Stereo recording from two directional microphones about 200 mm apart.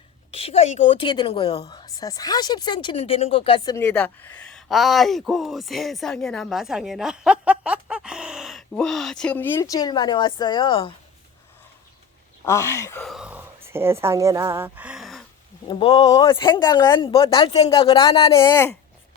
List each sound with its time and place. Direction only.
0.3 s speech: 30° left (ahead or behind)
12.5 s speech: 15° left (ahead or behind)
13.0 s a sound: centre (ahead or behind)
15.6 s speech: 25° left (ahead or behind)
18.3 s speech: 10° left (ahead or behind)